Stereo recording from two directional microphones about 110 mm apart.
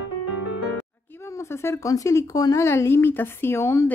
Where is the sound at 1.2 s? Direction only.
25° left (ahead or behind).